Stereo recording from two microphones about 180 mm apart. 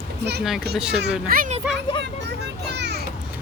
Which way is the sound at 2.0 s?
70° right (ahead or behind).